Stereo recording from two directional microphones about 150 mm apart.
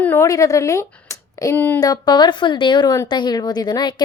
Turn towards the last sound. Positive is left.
turn(degrees=30)  # may be behind; listen again after turning